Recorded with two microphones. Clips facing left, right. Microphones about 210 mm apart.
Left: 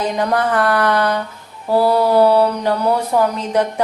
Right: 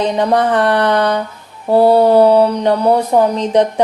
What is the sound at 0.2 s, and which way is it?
Speech, 25° right (ahead or behind).